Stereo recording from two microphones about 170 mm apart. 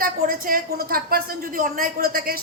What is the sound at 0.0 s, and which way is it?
A woman's voice, 55° right (ahead or behind).